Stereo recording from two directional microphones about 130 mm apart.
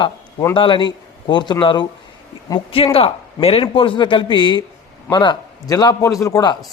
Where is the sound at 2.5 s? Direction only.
25° left (ahead or behind).